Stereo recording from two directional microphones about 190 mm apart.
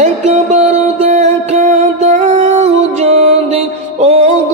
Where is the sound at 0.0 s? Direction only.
40° right (ahead or behind).